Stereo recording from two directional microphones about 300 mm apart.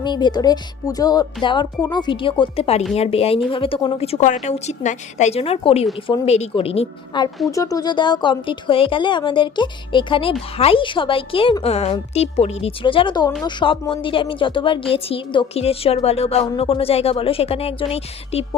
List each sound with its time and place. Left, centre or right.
0.0 s a woman's voice: centre